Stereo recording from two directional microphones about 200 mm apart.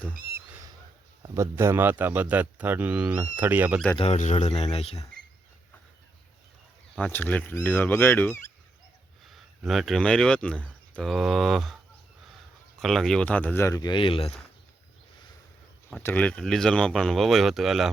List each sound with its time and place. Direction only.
1.2 s speech: 15° right (ahead or behind)
3.9 s speech: 30° left (ahead or behind)
6.9 s speech: 5° left (ahead or behind)
9.2 s speech: centre (ahead or behind)
12.8 s speech: centre (ahead or behind); by 14.3 s 25° left (ahead or behind)
15.9 s speech: 5° left (ahead or behind)